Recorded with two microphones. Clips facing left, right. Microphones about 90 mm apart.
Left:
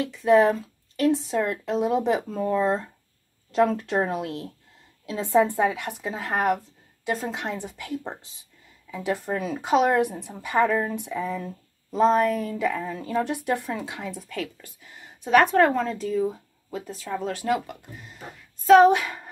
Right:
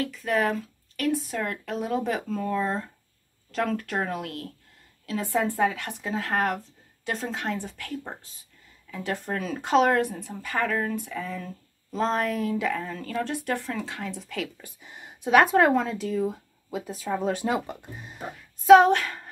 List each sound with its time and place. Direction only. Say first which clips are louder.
0.0 s speech: left 7 dB; 20° left (ahead or behind)
12.1 s speech: left 4 dB; centre (ahead or behind)
14.6 s speech: right 2 dB; 20° right (ahead or behind)
18.9 s music: left 3 dB; 10° left (ahead or behind)